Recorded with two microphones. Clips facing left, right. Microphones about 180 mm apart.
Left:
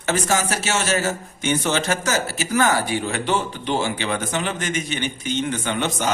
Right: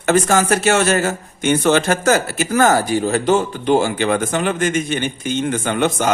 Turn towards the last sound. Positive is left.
turn(degrees=-50)  # may be behind; listen again after turning